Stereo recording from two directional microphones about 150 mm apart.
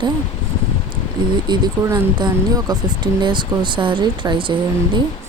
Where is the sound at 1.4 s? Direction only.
30° right (ahead or behind).